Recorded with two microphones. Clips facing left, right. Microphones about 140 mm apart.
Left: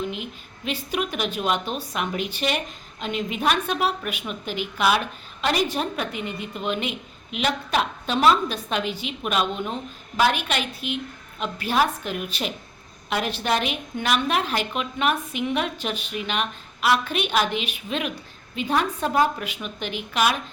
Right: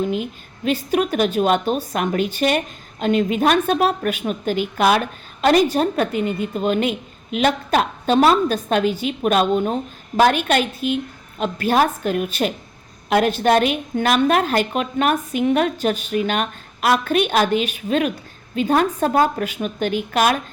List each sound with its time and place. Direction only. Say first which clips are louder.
0.0 s a woman's voice: right 8 dB; 40° right (ahead or behind)